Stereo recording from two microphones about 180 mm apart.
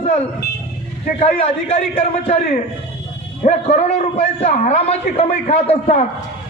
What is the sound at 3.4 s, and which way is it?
A man's voice, 40° left (ahead or behind).